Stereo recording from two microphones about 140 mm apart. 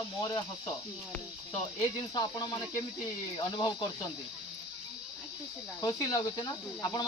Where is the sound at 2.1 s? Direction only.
30° left (ahead or behind).